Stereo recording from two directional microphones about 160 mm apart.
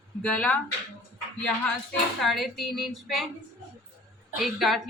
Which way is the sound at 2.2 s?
Centre (ahead or behind).